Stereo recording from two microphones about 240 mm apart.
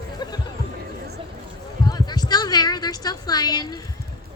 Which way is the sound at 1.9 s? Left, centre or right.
Centre.